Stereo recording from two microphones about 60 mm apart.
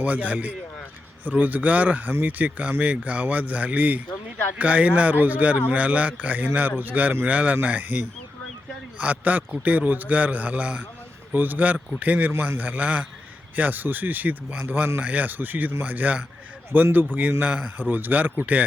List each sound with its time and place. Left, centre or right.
0.0 s a man's voice: right
12.3 s a man's voice: right